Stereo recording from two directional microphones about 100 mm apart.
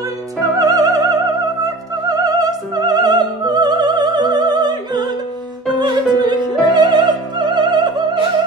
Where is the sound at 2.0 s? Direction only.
40° right (ahead or behind).